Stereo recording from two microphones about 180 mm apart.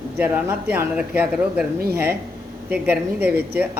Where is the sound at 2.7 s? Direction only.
10° right (ahead or behind).